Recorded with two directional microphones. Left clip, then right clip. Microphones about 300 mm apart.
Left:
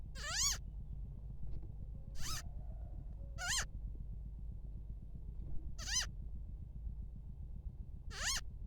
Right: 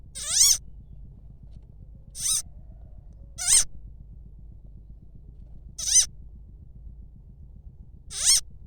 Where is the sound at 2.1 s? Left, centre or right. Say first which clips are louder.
Right 17 dB; centre.